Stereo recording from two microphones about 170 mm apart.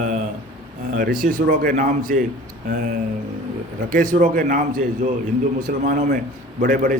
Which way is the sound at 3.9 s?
55° right (ahead or behind).